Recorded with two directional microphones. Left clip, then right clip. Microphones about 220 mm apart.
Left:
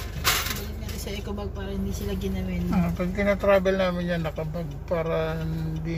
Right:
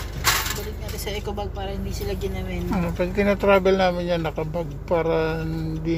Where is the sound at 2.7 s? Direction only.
20° right (ahead or behind).